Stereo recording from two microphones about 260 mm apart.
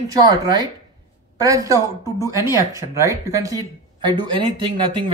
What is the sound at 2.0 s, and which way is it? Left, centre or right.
Speech, centre.